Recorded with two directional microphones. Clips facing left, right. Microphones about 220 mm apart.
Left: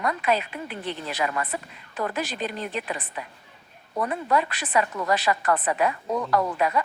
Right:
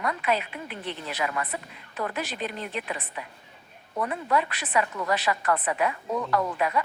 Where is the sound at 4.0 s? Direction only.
45° left (ahead or behind).